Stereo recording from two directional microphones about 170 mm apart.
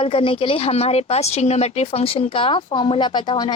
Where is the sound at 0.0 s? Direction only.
30° left (ahead or behind).